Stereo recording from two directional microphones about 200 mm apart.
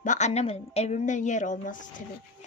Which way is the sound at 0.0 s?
35° left (ahead or behind).